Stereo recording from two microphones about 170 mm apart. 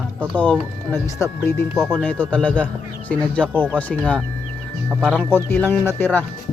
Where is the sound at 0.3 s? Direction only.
10° left (ahead or behind).